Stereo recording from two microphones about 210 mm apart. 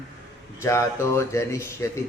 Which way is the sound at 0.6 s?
15° left (ahead or behind).